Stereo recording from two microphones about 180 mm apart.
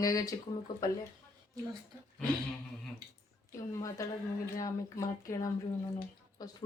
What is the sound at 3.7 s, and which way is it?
Speech, 20° left (ahead or behind).